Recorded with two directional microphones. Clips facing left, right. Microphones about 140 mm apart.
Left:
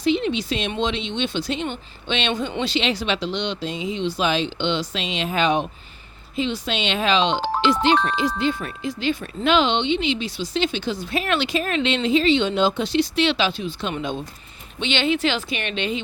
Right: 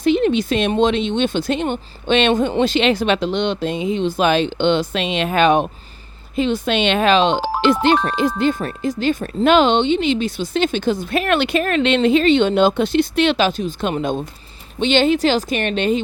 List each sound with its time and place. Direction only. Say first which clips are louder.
0.0 s speech: right 5 dB; 50° right (ahead or behind)